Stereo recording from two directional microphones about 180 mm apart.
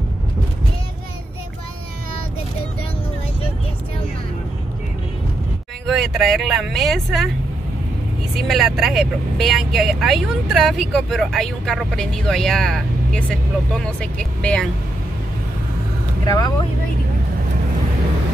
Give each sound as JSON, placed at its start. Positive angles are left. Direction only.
{"t": 5.9, "sound": "speech", "side_deg": 0}
{"t": 8.4, "sound": "speech", "side_deg": 0}
{"t": 16.3, "sound": "speech", "side_deg": 20}